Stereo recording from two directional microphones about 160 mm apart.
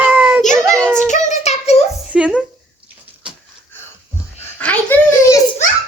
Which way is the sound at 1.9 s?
10° right (ahead or behind).